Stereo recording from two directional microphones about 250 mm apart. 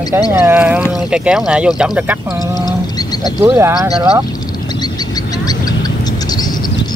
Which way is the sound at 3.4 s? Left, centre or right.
Centre.